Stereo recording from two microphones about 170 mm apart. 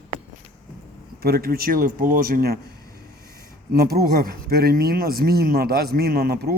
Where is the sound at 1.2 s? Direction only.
65° right (ahead or behind).